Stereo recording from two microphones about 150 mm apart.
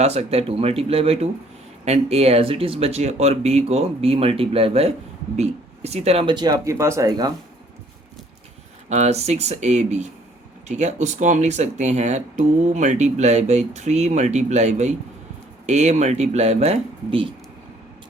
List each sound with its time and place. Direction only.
0.0 s speech: 45° right (ahead or behind); by 7.3 s 25° right (ahead or behind)
8.9 s speech: 50° right (ahead or behind)